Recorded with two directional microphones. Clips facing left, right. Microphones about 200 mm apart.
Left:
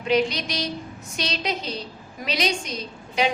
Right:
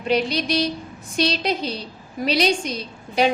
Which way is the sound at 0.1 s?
30° right (ahead or behind).